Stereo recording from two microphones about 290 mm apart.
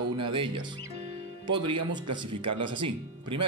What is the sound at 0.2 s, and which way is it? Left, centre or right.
Speech, centre.